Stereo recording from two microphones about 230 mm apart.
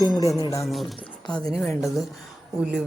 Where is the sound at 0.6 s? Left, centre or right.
Centre.